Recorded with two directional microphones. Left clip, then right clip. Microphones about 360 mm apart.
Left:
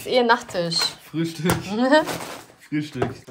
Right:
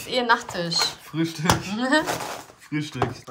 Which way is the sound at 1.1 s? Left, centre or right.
Right.